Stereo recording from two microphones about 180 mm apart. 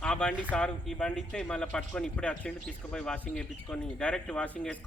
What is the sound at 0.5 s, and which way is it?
A man's voice, 5° left (ahead or behind).